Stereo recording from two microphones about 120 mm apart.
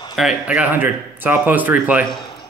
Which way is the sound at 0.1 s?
5° right (ahead or behind).